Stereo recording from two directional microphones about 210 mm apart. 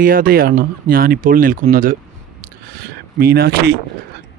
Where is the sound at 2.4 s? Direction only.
45° right (ahead or behind).